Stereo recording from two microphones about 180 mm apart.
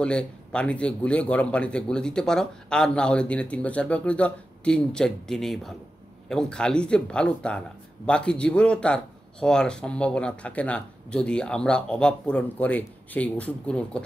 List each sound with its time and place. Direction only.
0.0 s speech: 5° left (ahead or behind)